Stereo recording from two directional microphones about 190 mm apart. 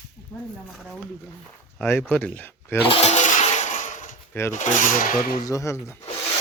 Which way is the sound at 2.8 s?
30° left (ahead or behind).